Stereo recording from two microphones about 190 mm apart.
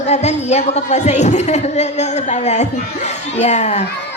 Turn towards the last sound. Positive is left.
turn(degrees=35)  # may be behind; listen again after turning